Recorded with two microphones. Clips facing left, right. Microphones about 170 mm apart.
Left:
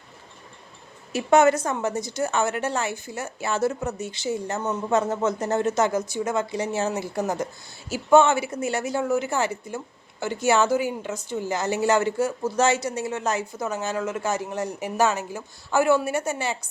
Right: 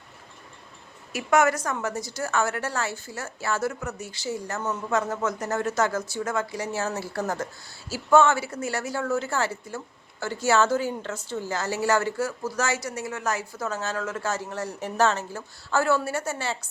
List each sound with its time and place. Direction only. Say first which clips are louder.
1.1 s a woman's voice: left 4 dB; 25° left (ahead or behind)